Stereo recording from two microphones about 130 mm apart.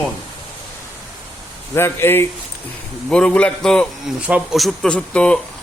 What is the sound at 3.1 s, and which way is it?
Speech, 5° left (ahead or behind).